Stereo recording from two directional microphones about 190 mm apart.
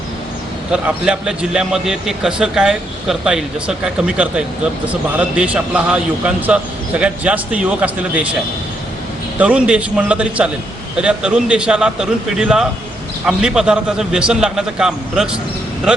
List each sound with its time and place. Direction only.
0.7 s a man's voice: 5° right (ahead or behind)
9.4 s a man's voice: 5° right (ahead or behind)